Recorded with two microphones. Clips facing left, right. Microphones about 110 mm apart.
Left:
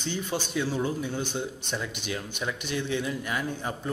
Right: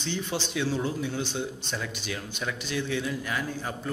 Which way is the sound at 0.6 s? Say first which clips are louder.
Even; 15° left (ahead or behind).